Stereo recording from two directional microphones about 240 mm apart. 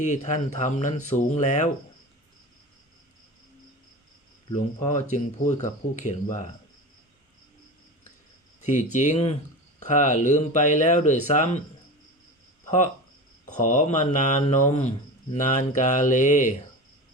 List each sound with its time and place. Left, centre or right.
0.0 s speech: left
4.4 s speech: left
8.6 s speech: left
13.5 s speech: left